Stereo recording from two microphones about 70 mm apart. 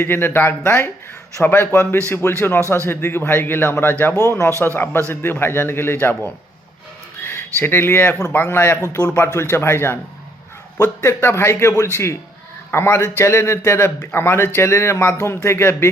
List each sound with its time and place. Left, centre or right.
0.0 s a man's voice: left
4.1 s speech: left
4.6 s a man's voice: left
11.0 s a man's voice: left